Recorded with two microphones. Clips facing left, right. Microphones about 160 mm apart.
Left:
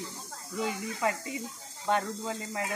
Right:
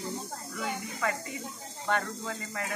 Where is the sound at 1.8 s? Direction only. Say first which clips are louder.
Left 2 dB; 25° left (ahead or behind).